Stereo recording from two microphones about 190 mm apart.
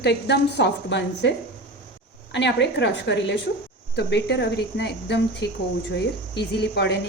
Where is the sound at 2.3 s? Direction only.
65° left (ahead or behind).